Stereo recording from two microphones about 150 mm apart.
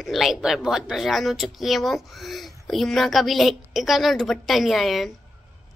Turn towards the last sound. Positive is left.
turn(degrees=0)  # may be behind; listen again after turning